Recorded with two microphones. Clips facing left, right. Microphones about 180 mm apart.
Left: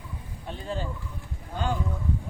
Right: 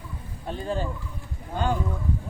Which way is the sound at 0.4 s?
45° right (ahead or behind).